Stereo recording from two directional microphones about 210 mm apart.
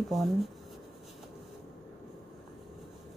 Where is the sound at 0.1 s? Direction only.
Centre (ahead or behind).